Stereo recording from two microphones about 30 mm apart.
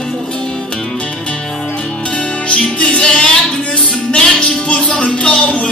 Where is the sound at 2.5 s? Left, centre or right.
Left.